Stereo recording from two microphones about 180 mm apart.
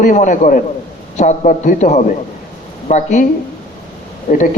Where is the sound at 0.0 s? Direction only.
45° left (ahead or behind).